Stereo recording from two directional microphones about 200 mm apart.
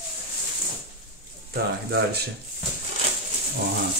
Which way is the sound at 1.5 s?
50° right (ahead or behind).